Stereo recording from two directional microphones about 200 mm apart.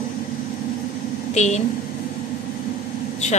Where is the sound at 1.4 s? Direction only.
35° left (ahead or behind).